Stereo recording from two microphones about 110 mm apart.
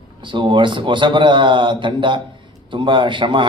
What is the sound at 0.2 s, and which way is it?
A man's voice, 45° right (ahead or behind).